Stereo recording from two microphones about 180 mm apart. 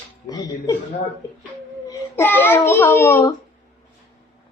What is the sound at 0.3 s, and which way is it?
Speech, 20° left (ahead or behind).